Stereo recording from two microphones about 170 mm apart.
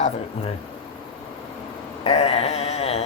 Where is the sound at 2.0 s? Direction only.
40° left (ahead or behind).